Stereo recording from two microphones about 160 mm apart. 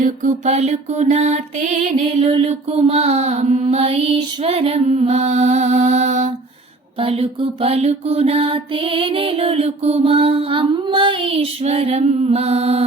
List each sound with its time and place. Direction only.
0.0 s female singing: 50° right (ahead or behind)
7.0 s mantra: 35° right (ahead or behind)